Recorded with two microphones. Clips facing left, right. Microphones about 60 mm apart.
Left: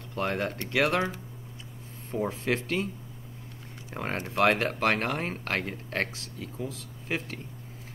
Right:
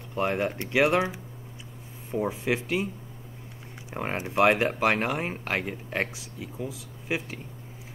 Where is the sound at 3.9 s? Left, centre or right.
Centre.